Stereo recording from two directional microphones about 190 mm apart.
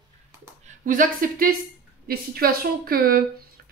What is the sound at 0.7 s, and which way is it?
Speech, 45° right (ahead or behind).